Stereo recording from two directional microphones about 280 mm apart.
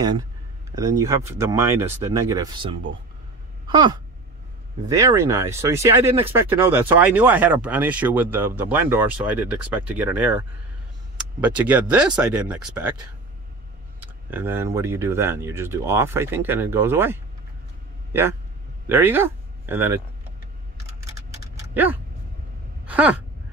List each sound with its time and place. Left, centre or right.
0.0 s speech: centre
13.9 s speech: centre
18.9 s speech: centre
22.8 s speech: centre